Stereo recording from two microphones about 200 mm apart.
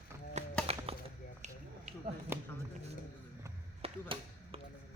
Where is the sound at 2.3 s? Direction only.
10° right (ahead or behind).